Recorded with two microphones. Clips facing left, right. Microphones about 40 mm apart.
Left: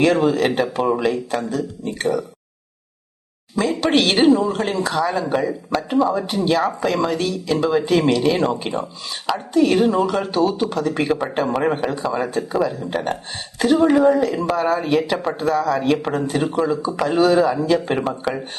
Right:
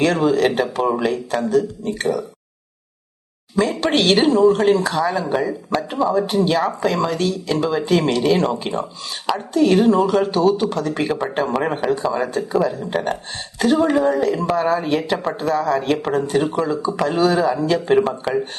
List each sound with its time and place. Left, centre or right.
0.0 s speech: centre
3.6 s speech: centre